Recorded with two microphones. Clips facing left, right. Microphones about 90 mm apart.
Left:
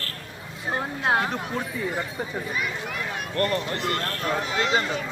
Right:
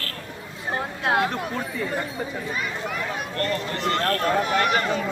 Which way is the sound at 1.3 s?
10° left (ahead or behind).